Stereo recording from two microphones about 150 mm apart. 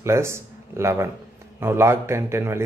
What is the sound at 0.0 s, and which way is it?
A man's voice, 15° right (ahead or behind).